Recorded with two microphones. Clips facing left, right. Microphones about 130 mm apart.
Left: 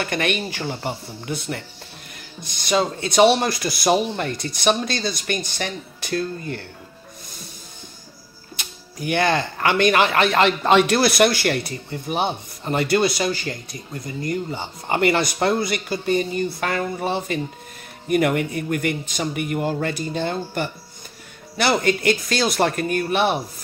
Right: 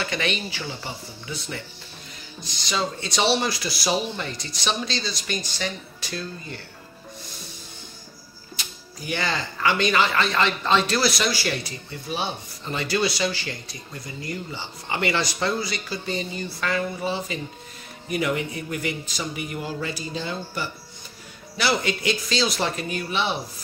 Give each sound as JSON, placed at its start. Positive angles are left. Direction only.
{"t": 0.0, "sound": "speech", "side_deg": 55}
{"t": 8.5, "sound": "speech", "side_deg": 55}